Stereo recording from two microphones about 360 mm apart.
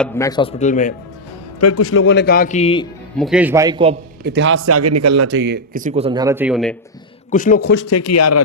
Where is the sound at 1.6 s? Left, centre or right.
Left; by 2.8 s centre.